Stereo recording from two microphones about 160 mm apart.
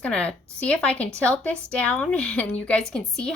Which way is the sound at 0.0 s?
10° left (ahead or behind).